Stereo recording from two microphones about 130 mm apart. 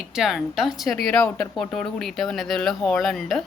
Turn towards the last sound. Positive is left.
turn(degrees=0)  # may be behind; listen again after turning